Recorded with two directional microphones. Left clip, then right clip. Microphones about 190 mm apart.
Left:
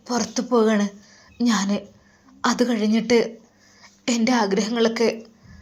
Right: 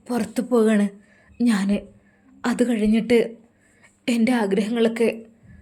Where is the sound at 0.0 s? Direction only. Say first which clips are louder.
Left 1 dB; 25° right (ahead or behind).